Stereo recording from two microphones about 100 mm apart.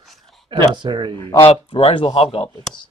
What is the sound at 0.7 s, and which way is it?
Speech, 50° right (ahead or behind).